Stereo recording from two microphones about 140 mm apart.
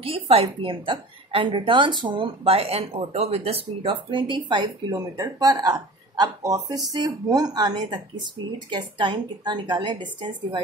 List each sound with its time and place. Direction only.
0.0 s a woman's voice: 40° right (ahead or behind)